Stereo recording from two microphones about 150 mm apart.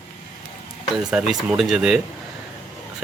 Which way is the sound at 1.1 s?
5° right (ahead or behind).